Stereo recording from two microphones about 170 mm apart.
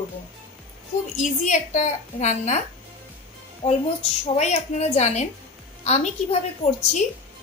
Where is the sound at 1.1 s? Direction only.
45° left (ahead or behind).